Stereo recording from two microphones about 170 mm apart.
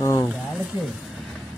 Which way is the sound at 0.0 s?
20° left (ahead or behind).